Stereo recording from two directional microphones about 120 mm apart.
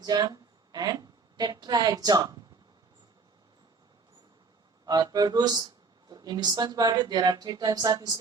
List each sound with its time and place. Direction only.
0.0 s a woman's voice: 35° right (ahead or behind)
4.9 s speech: 35° right (ahead or behind)